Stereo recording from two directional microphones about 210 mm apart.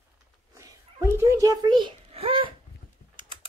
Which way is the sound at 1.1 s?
15° right (ahead or behind).